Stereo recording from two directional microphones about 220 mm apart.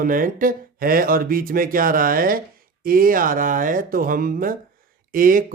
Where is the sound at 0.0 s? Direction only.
40° right (ahead or behind).